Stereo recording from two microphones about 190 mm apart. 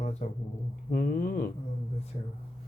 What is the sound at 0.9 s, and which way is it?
Speech, 50° left (ahead or behind).